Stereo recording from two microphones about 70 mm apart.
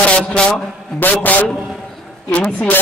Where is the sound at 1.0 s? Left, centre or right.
Left.